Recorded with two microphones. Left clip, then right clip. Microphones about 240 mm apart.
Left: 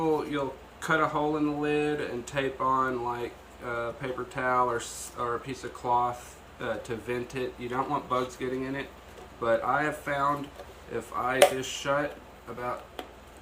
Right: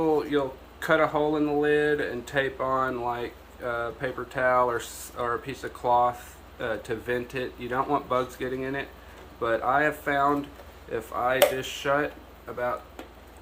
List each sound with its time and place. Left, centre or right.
0.3 s speech: centre